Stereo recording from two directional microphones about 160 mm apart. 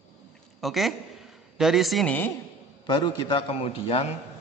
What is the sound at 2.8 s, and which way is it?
A man's voice, 25° left (ahead or behind).